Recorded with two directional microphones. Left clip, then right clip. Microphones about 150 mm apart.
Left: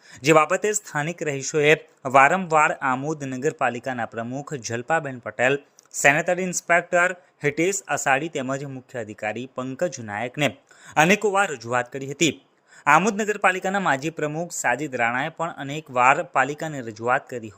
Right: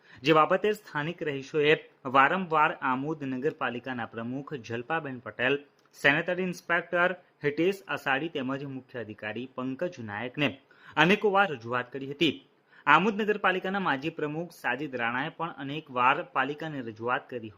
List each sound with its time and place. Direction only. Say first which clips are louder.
0.2 s speech: left 5 dB; 30° left (ahead or behind)